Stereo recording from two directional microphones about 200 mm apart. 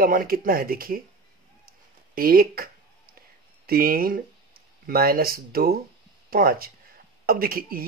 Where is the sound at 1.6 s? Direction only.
50° right (ahead or behind).